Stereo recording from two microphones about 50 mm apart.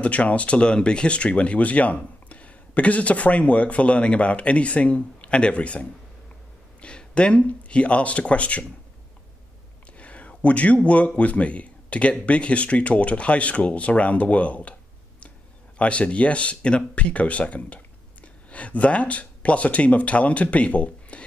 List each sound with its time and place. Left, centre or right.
0.0 s speech: left
9.9 s speech: left